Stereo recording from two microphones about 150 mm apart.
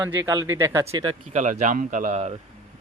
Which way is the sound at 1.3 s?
55° right (ahead or behind).